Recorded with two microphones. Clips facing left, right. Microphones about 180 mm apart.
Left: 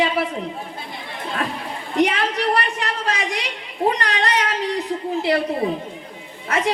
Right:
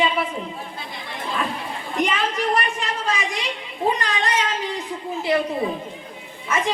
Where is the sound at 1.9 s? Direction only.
70° left (ahead or behind).